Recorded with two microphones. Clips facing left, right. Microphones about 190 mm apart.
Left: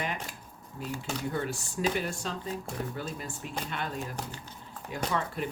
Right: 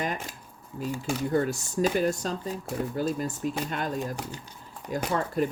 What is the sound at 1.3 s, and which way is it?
Speech, 40° right (ahead or behind).